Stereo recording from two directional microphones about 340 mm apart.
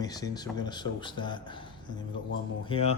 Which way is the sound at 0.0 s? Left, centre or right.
Centre.